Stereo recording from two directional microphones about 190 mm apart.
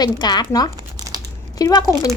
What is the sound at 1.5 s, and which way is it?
Speech, 20° left (ahead or behind).